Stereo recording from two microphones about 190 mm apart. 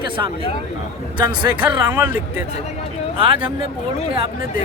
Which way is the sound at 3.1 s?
30° right (ahead or behind).